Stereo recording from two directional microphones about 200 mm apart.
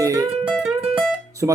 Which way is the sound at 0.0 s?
15° right (ahead or behind).